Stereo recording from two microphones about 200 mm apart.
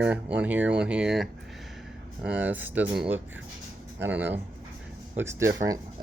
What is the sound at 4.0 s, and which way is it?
Speech, 10° right (ahead or behind).